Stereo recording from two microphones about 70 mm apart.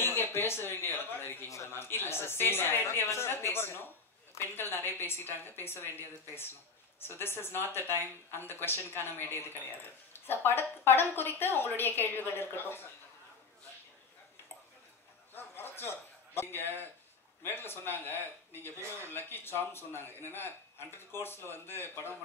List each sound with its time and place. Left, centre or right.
0.0 s speech: left
15.3 s a sound: left
17.4 s speech: left